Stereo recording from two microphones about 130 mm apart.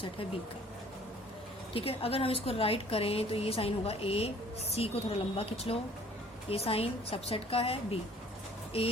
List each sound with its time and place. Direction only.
1.7 s a woman's voice: 45° left (ahead or behind)